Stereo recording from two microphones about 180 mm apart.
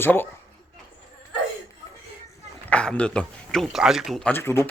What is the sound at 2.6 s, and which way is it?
A man's voice, 5° left (ahead or behind).